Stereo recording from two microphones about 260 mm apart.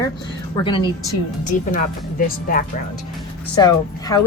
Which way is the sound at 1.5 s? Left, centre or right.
Left.